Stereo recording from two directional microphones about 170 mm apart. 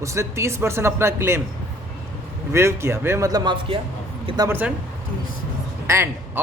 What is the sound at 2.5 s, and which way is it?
A man's voice, 15° right (ahead or behind).